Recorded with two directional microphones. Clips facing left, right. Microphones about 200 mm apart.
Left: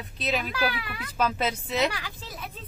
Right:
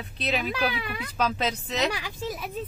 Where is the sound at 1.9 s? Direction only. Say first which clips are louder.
Right 7 dB; 15° right (ahead or behind).